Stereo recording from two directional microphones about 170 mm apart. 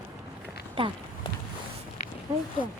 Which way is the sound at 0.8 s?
30° right (ahead or behind).